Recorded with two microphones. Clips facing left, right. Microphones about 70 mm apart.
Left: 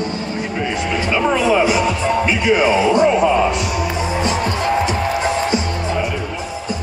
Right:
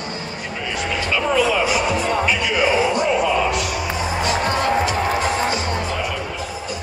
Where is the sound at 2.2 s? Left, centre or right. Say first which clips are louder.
Left 4 dB; left.